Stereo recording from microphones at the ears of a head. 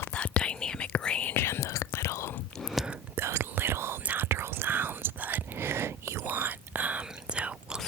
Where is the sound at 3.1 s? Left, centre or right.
Right.